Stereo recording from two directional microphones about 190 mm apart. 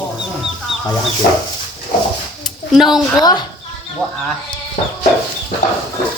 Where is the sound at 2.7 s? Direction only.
Centre (ahead or behind).